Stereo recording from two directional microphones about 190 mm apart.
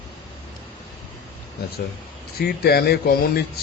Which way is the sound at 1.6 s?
55° left (ahead or behind).